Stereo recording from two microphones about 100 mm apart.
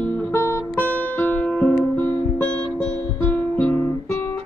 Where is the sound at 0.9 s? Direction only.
15° left (ahead or behind).